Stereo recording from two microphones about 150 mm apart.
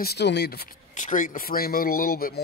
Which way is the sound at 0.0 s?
90° left.